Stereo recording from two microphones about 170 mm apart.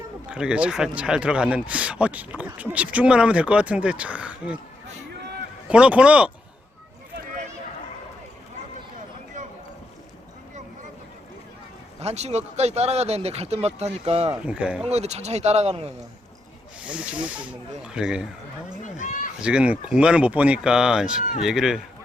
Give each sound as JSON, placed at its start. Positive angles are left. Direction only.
{"t": 0.3, "sound": "speech", "side_deg": -5}
{"t": 5.6, "sound": "speech", "side_deg": -5}
{"t": 11.9, "sound": "speech", "side_deg": -40}
{"t": 14.4, "sound": "speech", "side_deg": -5}
{"t": 14.8, "sound": "speech", "side_deg": -40}
{"t": 16.8, "sound": "speech", "side_deg": -5}
{"t": 18.8, "sound": "speech", "side_deg": 50}
{"t": 19.4, "sound": "speech", "side_deg": -5}